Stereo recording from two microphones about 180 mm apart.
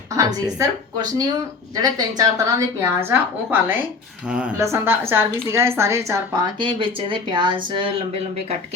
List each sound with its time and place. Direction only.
0.4 s a woman's voice: 20° right (ahead or behind)
6.6 s speech: 30° right (ahead or behind)